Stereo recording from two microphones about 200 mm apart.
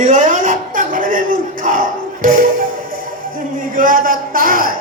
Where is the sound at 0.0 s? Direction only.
40° right (ahead or behind).